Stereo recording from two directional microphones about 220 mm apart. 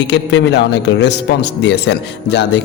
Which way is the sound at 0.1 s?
50° left (ahead or behind).